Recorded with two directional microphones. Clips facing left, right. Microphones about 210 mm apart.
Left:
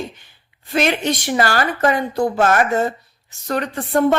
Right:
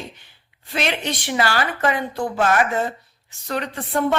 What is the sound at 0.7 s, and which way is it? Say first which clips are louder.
A woman's voice: left 6 dB; 45° left (ahead or behind).